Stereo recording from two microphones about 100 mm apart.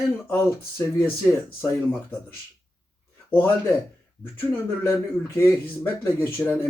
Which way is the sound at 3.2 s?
20° left (ahead or behind).